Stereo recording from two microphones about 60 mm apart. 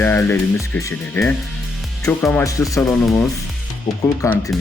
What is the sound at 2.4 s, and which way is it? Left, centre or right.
Speech, left.